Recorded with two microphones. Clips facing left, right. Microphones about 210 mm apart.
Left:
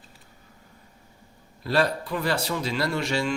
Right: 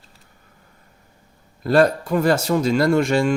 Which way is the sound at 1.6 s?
50° right (ahead or behind).